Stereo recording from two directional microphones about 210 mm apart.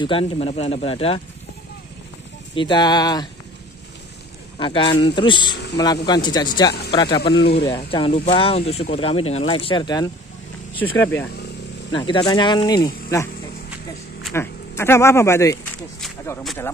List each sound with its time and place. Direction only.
0.0 s speech: 25° left (ahead or behind)
2.5 s speech: 20° left (ahead or behind)
4.6 s speech: 25° left (ahead or behind)
6.7 s speech: 50° left (ahead or behind)
7.9 s speech: 25° left (ahead or behind)
10.8 s speech: 10° left (ahead or behind)
11.9 s speech: 20° left (ahead or behind)
14.3 s speech: 10° left (ahead or behind)